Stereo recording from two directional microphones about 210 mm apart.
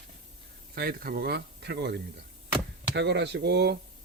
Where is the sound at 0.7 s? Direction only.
45° right (ahead or behind).